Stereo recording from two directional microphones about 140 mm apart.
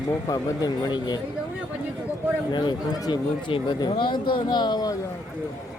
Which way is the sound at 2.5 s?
35° left (ahead or behind).